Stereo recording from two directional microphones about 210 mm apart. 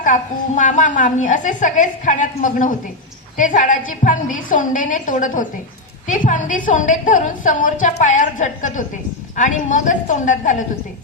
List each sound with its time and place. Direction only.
0.0 s a woman's voice: 35° left (ahead or behind)